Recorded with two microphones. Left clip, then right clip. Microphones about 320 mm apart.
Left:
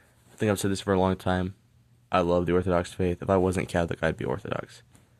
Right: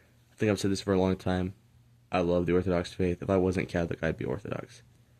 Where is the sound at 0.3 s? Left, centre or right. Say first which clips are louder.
Left 2 dB; centre.